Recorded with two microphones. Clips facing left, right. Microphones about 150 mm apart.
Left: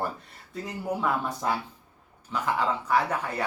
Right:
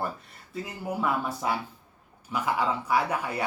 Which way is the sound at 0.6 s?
5° right (ahead or behind).